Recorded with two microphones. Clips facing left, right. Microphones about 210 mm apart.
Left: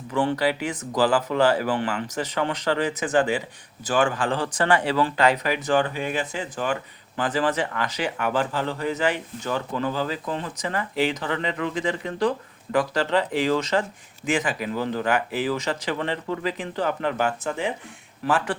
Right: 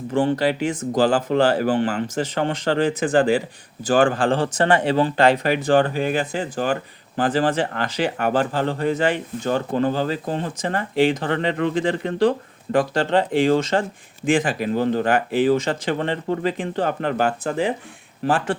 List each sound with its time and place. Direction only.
0.3 s speech: 25° right (ahead or behind)